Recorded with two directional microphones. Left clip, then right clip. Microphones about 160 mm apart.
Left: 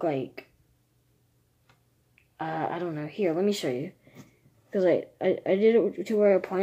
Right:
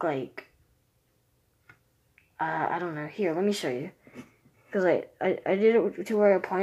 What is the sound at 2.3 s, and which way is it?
Speech, 30° left (ahead or behind).